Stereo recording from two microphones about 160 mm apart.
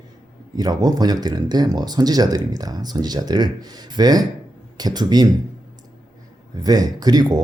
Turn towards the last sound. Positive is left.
turn(degrees=-25)  # may be behind; listen again after turning